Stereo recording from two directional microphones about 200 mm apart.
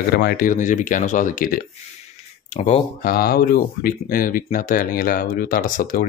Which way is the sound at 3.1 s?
50° left (ahead or behind).